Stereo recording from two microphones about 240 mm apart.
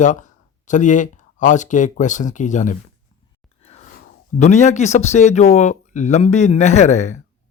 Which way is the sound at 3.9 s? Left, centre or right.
Left.